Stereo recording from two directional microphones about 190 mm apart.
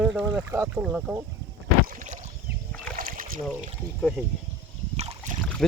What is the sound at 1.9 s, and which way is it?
Boat, 40° right (ahead or behind).